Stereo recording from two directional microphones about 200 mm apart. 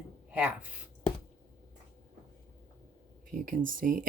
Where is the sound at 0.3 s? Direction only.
5° right (ahead or behind).